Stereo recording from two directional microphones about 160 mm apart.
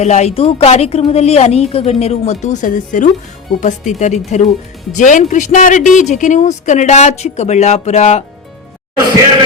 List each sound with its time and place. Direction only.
0.0 s a woman's voice: 45° left (ahead or behind)